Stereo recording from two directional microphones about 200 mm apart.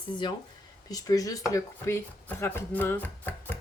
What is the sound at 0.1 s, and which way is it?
Speech, 25° left (ahead or behind).